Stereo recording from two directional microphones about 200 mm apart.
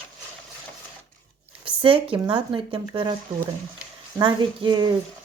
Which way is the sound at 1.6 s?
25° right (ahead or behind).